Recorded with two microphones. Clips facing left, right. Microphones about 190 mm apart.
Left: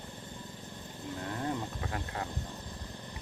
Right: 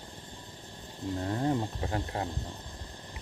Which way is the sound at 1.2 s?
30° right (ahead or behind).